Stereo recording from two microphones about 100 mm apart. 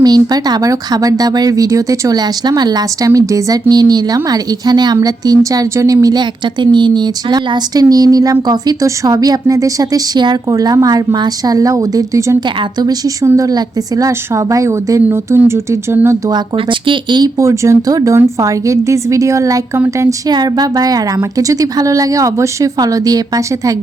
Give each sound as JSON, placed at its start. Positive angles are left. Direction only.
{"t": 0.0, "sound": "a woman's voice", "side_deg": -40}
{"t": 16.8, "sound": "speech", "side_deg": -50}
{"t": 17.4, "sound": "a woman's voice", "side_deg": -30}
{"t": 20.3, "sound": "a woman's voice", "side_deg": -40}